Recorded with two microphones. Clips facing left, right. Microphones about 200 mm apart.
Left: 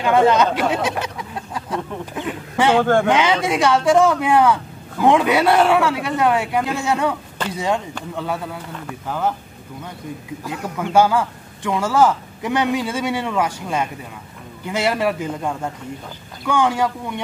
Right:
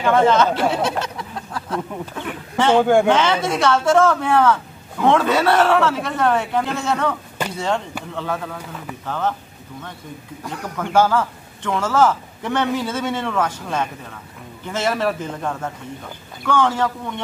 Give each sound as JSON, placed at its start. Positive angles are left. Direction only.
{"t": 0.0, "sound": "a man's voice", "side_deg": 15}
{"t": 0.8, "sound": "chicken", "side_deg": 15}
{"t": 2.1, "sound": "a man's voice", "side_deg": 15}
{"t": 2.8, "sound": "a man's voice", "side_deg": -10}
{"t": 3.1, "sound": "a man's voice", "side_deg": 15}
{"t": 10.4, "sound": "a man's voice", "side_deg": 5}